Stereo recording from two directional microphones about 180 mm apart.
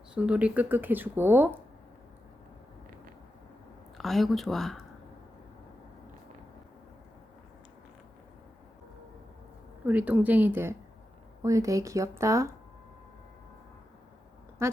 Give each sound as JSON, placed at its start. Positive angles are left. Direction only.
{"t": 0.1, "sound": "speech", "side_deg": -5}
{"t": 3.9, "sound": "speech", "side_deg": 0}
{"t": 9.8, "sound": "speech", "side_deg": -10}
{"t": 14.6, "sound": "a sound", "side_deg": -15}